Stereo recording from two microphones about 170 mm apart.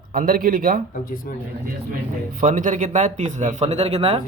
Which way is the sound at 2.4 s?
50° right (ahead or behind).